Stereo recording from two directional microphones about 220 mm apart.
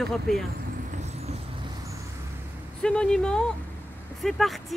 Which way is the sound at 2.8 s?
5° left (ahead or behind).